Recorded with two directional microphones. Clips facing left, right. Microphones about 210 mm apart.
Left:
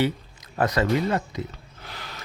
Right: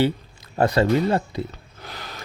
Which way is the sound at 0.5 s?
30° right (ahead or behind).